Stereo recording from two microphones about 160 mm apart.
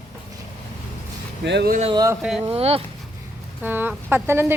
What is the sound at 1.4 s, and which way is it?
Speech, 90° right.